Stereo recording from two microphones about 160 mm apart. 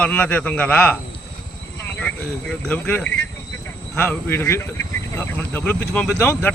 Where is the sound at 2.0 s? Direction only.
5° left (ahead or behind).